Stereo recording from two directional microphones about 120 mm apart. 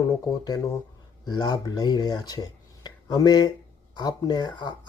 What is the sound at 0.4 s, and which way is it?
Speech, 30° left (ahead or behind).